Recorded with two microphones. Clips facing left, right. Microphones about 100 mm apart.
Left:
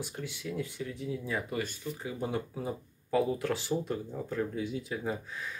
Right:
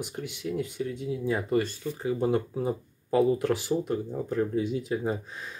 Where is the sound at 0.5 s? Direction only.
25° right (ahead or behind).